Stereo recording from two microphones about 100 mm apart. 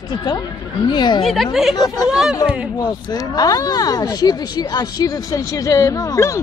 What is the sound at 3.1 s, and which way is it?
Speech, 40° left (ahead or behind).